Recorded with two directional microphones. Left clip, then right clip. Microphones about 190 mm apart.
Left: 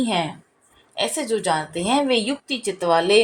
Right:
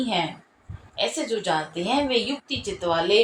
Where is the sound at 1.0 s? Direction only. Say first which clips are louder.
Left 3 dB; 60° left (ahead or behind).